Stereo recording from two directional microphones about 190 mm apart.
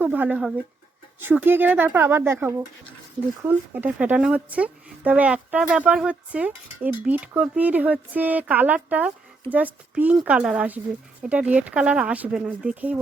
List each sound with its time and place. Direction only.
0.0 s speech: 10° right (ahead or behind)